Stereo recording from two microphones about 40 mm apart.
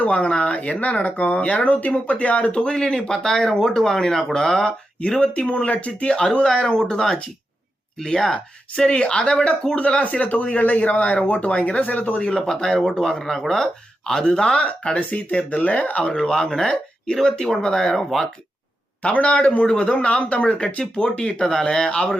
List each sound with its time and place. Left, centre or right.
0.0 s speech: left
2.6 s speech: centre
6.4 s speech: centre
10.0 s speech: left
11.8 s speech: left
12.3 s speech: centre
14.9 s speech: left
16.0 s speech: centre
19.0 s speech: left